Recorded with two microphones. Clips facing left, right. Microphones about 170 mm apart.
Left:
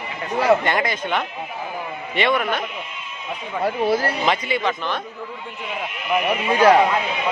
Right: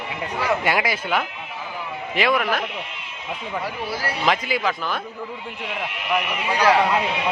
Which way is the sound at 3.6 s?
55° left (ahead or behind).